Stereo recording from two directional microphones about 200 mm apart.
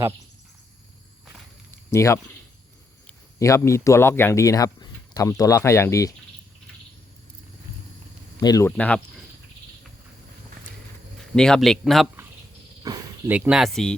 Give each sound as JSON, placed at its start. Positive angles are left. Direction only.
{"t": 1.9, "sound": "speech", "side_deg": 15}
{"t": 3.3, "sound": "speech", "side_deg": 15}
{"t": 8.4, "sound": "speech", "side_deg": 20}
{"t": 8.7, "sound": "speech", "side_deg": 5}
{"t": 11.2, "sound": "speech", "side_deg": 5}
{"t": 12.8, "sound": "a sound", "side_deg": -20}
{"t": 13.3, "sound": "speech", "side_deg": -5}